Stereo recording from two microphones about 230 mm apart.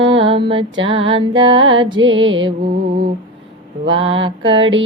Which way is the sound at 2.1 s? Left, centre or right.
Right.